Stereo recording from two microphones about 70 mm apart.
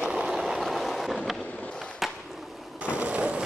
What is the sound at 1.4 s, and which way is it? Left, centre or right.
Skateboard, centre.